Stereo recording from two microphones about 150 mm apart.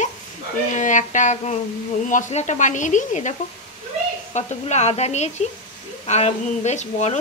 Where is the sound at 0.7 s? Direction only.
55° left (ahead or behind).